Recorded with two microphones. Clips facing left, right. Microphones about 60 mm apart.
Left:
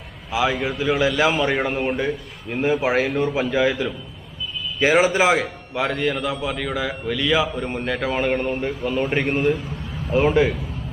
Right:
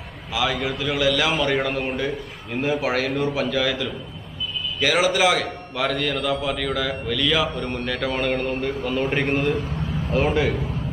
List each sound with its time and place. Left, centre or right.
0.3 s a man's voice: left
8.8 s a man's voice: centre